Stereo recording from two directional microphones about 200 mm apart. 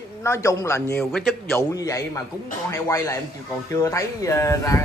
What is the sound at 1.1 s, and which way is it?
Speech, centre (ahead or behind).